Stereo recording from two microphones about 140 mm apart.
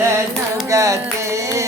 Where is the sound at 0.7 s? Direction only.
20° right (ahead or behind).